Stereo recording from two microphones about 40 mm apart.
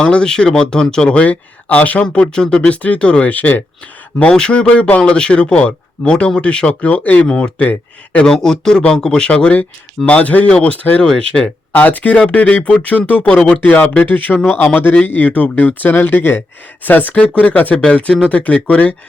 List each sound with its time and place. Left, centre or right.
0.0 s speech: left
1.1 s speech: left
2.0 s speech: left
2.6 s speech: left
3.2 s speech: left
4.3 s speech: left
8.2 s a man's voice: centre
9.3 s speech: left
12.2 s speech: left
12.5 s speech: left
15.3 s speech: left
16.8 s speech: left
17.2 s speech: left
17.8 s speech: left